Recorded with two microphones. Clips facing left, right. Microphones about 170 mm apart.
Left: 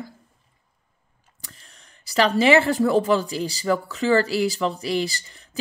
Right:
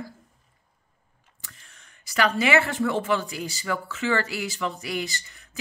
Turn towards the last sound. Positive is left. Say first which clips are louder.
# even
turn(degrees=30)  # may be behind; listen again after turning